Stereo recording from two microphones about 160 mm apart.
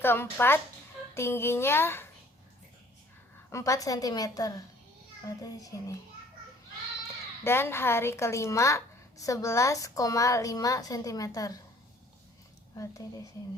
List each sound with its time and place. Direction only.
0.0 s a child's voice: 15° left (ahead or behind)
3.5 s a woman's voice: 20° left (ahead or behind)
7.4 s a woman's voice: 15° left (ahead or behind)
12.7 s speech: 20° left (ahead or behind)